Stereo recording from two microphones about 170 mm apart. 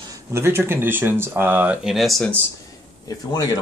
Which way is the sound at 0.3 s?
15° right (ahead or behind).